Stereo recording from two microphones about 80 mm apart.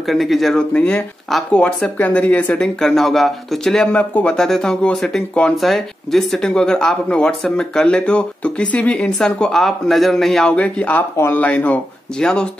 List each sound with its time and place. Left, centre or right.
0.0 s speech: centre
3.9 s speech: centre
4.4 s speech: centre
10.5 s speech: centre
11.1 s speech: left
11.4 s speech: centre
12.2 s speech: centre